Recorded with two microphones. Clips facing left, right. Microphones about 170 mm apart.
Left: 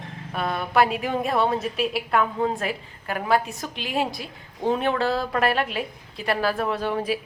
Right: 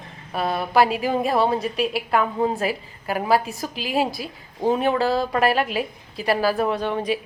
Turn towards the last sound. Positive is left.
turn(degrees=5)  # may be behind; listen again after turning